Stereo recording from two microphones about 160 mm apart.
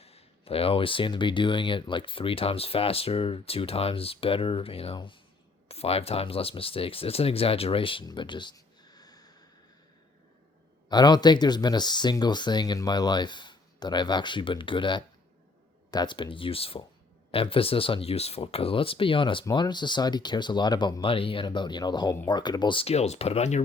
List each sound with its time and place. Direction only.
0.0 s speech: 40° left (ahead or behind)
10.8 s speech: 25° left (ahead or behind); by 23.6 s 45° left (ahead or behind)